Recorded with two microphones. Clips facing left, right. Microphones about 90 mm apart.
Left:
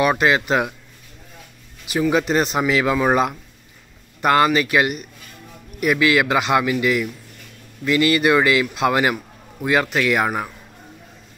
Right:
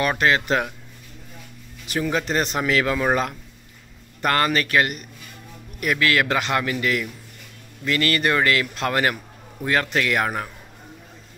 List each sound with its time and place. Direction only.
0.0 s a man's voice: 15° left (ahead or behind)
1.9 s a man's voice: 10° left (ahead or behind)